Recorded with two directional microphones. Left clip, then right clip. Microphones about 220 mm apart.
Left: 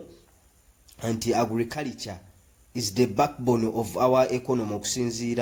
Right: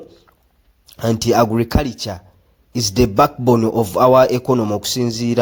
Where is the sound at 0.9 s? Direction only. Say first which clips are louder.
Right 10 dB; 35° right (ahead or behind).